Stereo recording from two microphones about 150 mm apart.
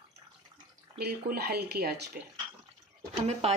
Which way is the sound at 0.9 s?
90° right.